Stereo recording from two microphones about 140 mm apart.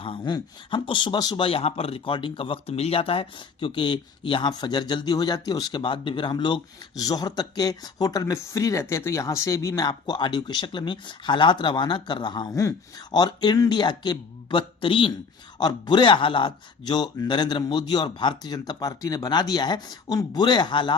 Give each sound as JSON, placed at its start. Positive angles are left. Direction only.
{"t": 0.0, "sound": "speech", "side_deg": 35}